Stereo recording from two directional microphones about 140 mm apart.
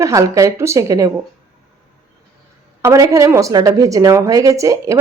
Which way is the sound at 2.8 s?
20° right (ahead or behind).